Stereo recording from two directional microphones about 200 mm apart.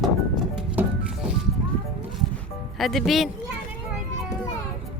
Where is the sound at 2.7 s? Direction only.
Centre (ahead or behind).